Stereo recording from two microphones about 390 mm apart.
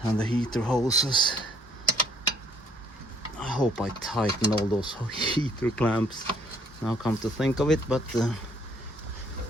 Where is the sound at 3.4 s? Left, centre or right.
Centre.